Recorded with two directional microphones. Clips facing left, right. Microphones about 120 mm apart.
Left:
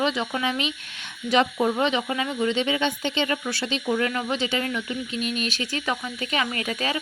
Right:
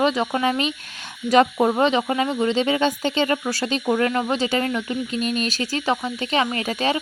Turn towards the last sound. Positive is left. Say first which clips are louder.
# right 5 dB
turn(degrees=-30)  # may be behind; listen again after turning